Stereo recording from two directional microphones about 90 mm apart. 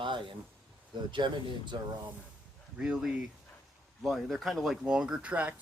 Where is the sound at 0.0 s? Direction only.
70° right (ahead or behind).